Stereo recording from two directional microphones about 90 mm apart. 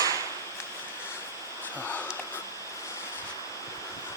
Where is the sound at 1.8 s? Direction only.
20° left (ahead or behind).